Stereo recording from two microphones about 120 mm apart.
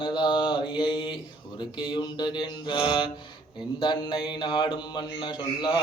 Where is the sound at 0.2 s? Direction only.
40° left (ahead or behind).